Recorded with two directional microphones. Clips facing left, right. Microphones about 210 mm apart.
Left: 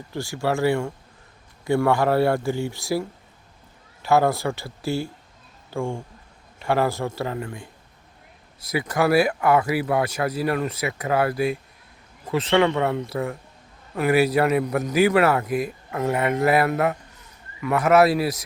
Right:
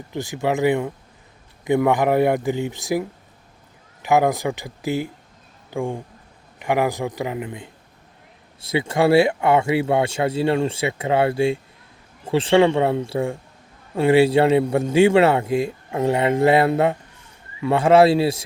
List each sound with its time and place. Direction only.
0.1 s a man's voice: 20° right (ahead or behind)